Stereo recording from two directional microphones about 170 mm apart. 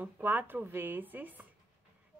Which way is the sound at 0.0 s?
10° right (ahead or behind).